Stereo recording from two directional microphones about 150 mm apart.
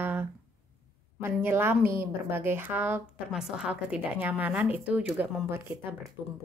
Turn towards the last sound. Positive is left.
turn(degrees=-15)  # may be behind; listen again after turning